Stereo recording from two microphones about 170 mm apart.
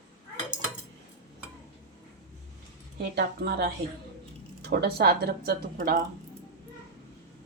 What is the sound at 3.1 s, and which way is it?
Speech, 70° right (ahead or behind).